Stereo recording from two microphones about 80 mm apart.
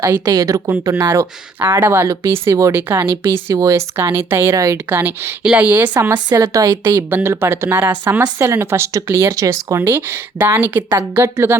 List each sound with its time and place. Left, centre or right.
0.3 s a woman's voice: right
0.9 s speech: right
4.9 s speech: right
6.3 s a woman's voice: right
6.9 s speech: right